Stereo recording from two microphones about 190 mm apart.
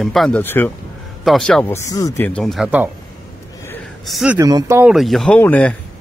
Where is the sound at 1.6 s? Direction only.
15° left (ahead or behind).